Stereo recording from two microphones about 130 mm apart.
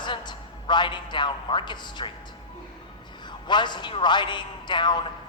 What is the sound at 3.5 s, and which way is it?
Music, 35° left (ahead or behind).